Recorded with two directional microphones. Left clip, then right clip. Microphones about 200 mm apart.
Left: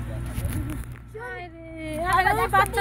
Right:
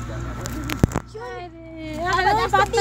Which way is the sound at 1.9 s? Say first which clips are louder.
Right 2 dB; 45° left (ahead or behind).